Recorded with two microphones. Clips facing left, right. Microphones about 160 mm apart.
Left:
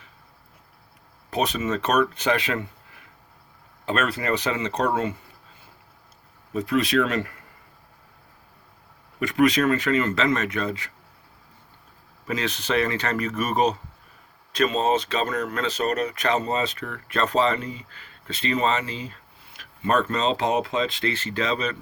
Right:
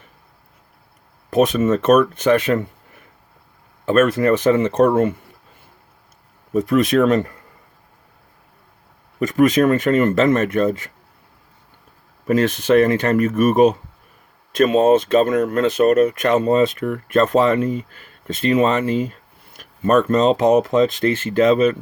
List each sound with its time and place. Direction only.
1.3 s speech: 50° right (ahead or behind)
3.8 s speech: 50° right (ahead or behind)
6.5 s speech: 50° right (ahead or behind)
9.2 s speech: 45° right (ahead or behind)
12.3 s speech: 50° right (ahead or behind)